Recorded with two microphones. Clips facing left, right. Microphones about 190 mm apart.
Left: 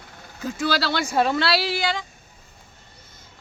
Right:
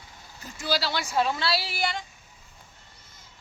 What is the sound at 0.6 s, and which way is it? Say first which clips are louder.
Speech: left 4 dB; 75° left (ahead or behind).